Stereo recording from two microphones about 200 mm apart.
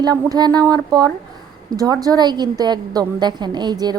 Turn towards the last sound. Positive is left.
turn(degrees=-20)  # may be behind; listen again after turning